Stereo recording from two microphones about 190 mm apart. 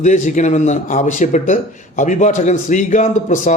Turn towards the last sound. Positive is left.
turn(degrees=40)  # may be behind; listen again after turning